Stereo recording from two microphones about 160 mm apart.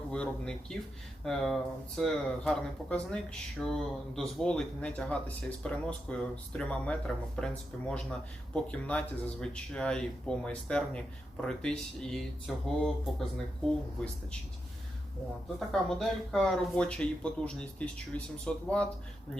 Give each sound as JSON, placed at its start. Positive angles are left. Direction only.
{"t": 0.1, "sound": "speech", "side_deg": 5}
{"t": 15.5, "sound": "speech", "side_deg": 0}